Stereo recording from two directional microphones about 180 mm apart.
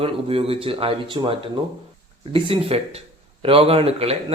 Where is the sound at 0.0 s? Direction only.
30° right (ahead or behind).